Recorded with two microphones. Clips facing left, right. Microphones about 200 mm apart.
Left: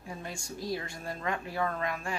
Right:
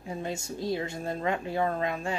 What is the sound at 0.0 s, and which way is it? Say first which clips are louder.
Speech: right 7 dB; 25° right (ahead or behind).